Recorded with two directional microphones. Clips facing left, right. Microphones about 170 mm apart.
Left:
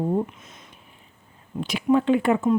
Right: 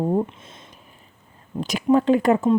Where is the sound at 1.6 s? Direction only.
40° right (ahead or behind).